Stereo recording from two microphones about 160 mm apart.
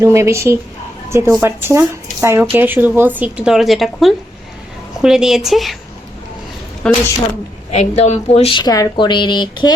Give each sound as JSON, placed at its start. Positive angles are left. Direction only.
{"t": 0.0, "sound": "a woman's voice", "side_deg": -20}
{"t": 6.8, "sound": "a woman's voice", "side_deg": 5}
{"t": 7.7, "sound": "a woman's voice", "side_deg": 45}
{"t": 8.5, "sound": "speech", "side_deg": 25}